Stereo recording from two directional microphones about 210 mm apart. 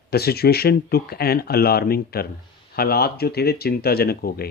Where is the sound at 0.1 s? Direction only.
50° left (ahead or behind).